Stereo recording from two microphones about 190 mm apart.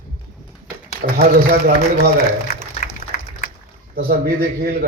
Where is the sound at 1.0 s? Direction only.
45° right (ahead or behind).